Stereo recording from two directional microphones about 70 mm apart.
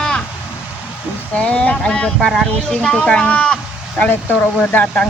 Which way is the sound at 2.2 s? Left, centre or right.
Centre.